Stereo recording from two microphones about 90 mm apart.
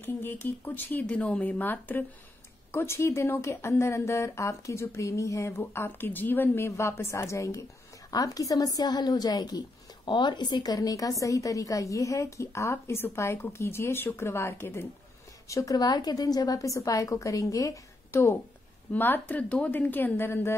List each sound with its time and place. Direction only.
0.0 s a woman's voice: 25° left (ahead or behind)
5.6 s a woman's voice: 25° left (ahead or behind)
15.4 s a woman's voice: 40° left (ahead or behind)